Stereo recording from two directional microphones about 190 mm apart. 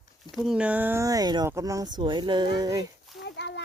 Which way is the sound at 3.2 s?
65° left (ahead or behind).